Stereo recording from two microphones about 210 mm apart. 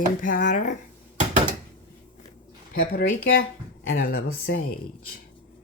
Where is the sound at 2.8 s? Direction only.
45° left (ahead or behind).